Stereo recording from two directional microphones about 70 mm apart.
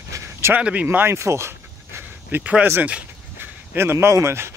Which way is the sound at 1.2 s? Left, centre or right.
Right.